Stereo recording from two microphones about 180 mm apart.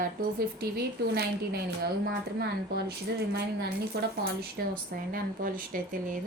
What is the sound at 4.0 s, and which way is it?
A woman's voice, 60° right (ahead or behind).